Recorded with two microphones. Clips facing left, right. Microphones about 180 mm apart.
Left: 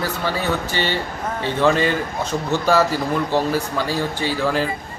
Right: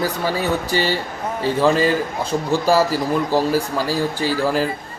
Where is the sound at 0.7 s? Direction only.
40° right (ahead or behind).